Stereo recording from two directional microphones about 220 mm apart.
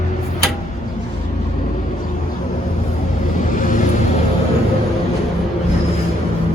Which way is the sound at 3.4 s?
35° left (ahead or behind).